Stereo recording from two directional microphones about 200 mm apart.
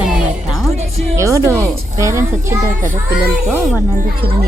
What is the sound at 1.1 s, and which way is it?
A child's voice, 15° right (ahead or behind).